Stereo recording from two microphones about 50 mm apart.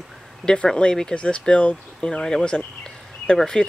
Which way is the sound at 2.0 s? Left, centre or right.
Centre.